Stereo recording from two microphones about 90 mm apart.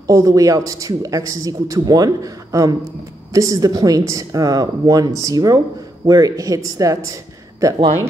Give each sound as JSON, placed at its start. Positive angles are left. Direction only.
{"t": 0.0, "sound": "a man's voice", "side_deg": -40}